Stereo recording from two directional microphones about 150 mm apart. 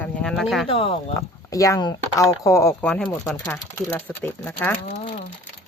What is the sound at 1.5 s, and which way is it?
Speech, 20° left (ahead or behind).